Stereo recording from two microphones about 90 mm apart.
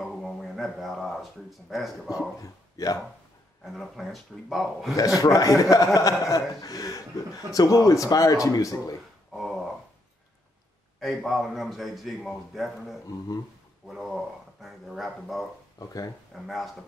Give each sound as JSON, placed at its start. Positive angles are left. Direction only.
{"t": 0.0, "sound": "speech", "side_deg": 0}
{"t": 2.0, "sound": "a man's voice", "side_deg": 40}
{"t": 3.6, "sound": "a man's voice", "side_deg": 0}
{"t": 4.9, "sound": "a man's voice", "side_deg": 40}
{"t": 9.3, "sound": "a sound", "side_deg": 0}
{"t": 11.0, "sound": "a man's voice", "side_deg": 0}
{"t": 16.4, "sound": "a man's voice", "side_deg": 0}